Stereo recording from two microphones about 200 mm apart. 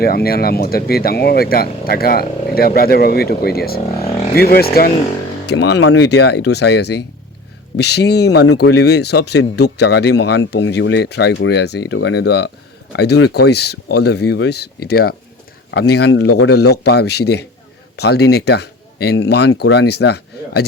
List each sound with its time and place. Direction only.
0.0 s speech: 50° left (ahead or behind)
5.5 s speech: 75° left (ahead or behind); by 20.7 s 55° left (ahead or behind)